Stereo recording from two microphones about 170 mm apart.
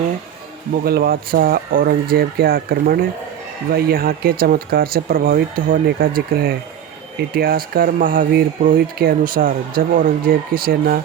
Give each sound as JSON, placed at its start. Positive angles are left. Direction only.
{"t": 0.9, "sound": "speech", "side_deg": -60}